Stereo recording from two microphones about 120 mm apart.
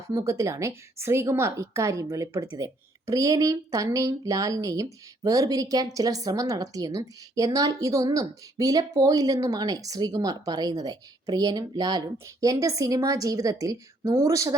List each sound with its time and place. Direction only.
0.1 s speech: 25° right (ahead or behind)